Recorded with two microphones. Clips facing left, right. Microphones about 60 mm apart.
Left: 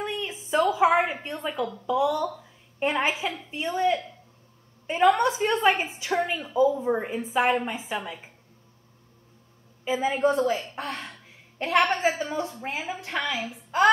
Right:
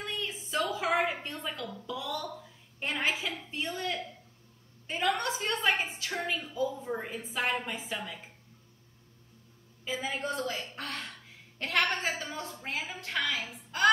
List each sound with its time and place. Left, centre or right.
0.0 s a sound: left
2.8 s a woman's voice: left
9.8 s a woman's voice: left